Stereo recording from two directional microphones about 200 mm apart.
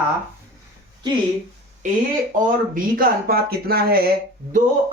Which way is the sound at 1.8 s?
40° right (ahead or behind).